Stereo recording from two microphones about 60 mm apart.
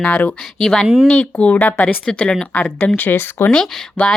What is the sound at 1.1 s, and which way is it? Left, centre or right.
Speech, left.